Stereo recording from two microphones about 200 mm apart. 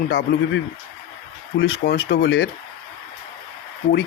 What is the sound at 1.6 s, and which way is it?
Speech, 55° left (ahead or behind).